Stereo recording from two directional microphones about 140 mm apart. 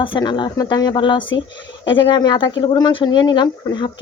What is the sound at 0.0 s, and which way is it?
Speech, 35° left (ahead or behind).